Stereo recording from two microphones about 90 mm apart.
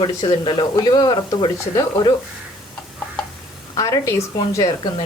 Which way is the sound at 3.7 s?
40° left (ahead or behind).